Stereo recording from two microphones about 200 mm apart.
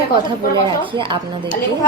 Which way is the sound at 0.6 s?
25° right (ahead or behind).